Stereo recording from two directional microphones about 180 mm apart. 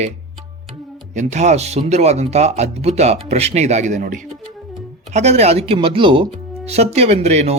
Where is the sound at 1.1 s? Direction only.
40° right (ahead or behind).